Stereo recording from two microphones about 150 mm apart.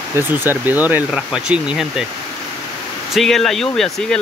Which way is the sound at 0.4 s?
15° right (ahead or behind).